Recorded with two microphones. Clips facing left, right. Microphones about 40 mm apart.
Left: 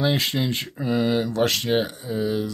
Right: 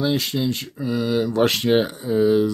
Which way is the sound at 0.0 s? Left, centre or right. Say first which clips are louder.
Right 1 dB; left.